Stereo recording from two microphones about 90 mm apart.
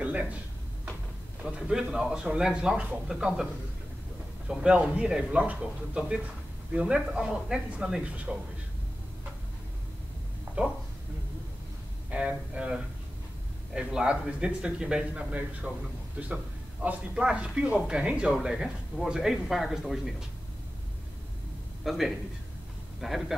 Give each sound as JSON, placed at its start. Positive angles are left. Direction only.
{"t": 0.0, "sound": "speech", "side_deg": -15}
{"t": 1.4, "sound": "a man's voice", "side_deg": -5}
{"t": 4.5, "sound": "a man's voice", "side_deg": -10}
{"t": 10.6, "sound": "a man's voice", "side_deg": -15}
{"t": 12.1, "sound": "a man's voice", "side_deg": -10}
{"t": 16.8, "sound": "a man's voice", "side_deg": -10}
{"t": 21.8, "sound": "a man's voice", "side_deg": 0}